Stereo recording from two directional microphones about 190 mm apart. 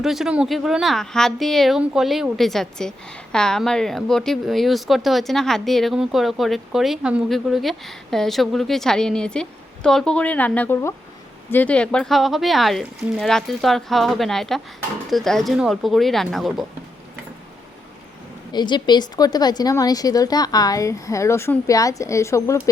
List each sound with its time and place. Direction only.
0.0 s speech: centre (ahead or behind)
18.5 s a woman's voice: 25° left (ahead or behind)